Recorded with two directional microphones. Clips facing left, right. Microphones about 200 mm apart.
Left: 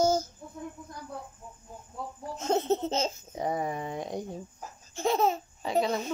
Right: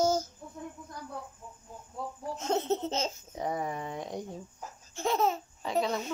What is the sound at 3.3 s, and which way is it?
Speech, 15° left (ahead or behind).